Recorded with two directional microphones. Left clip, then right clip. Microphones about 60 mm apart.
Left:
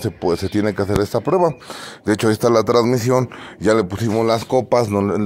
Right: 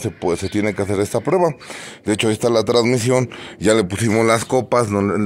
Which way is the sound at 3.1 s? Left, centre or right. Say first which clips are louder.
Even; centre.